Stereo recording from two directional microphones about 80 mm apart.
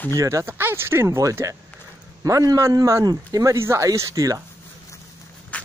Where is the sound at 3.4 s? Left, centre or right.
Right.